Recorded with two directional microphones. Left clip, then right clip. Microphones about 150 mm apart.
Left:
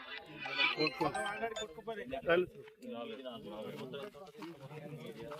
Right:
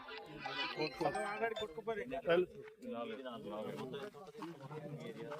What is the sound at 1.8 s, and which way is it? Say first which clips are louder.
Speech: right 2 dB; 30° right (ahead or behind).